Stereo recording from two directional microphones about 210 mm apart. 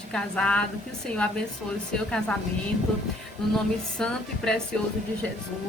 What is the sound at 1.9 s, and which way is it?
Speech, 5° left (ahead or behind).